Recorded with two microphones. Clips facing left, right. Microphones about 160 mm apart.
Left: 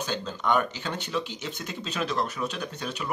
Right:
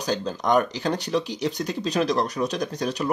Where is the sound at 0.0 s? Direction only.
40° right (ahead or behind).